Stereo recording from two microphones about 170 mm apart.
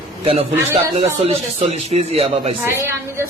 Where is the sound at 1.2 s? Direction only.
35° right (ahead or behind).